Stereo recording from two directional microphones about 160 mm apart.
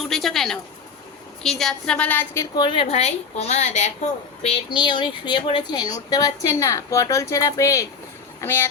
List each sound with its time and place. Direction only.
0.1 s a woman's voice: centre (ahead or behind); by 3.9 s 45° left (ahead or behind)
4.4 s a woman's voice: 35° left (ahead or behind); by 8.6 s 15° left (ahead or behind)